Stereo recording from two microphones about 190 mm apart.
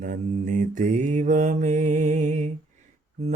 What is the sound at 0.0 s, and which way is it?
Mantra, 40° right (ahead or behind).